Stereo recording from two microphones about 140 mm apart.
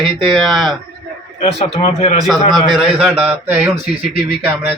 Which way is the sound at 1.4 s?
45° left (ahead or behind).